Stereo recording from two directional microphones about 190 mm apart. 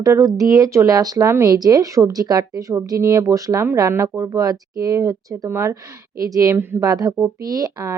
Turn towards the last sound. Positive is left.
turn(degrees=-15)  # may be behind; listen again after turning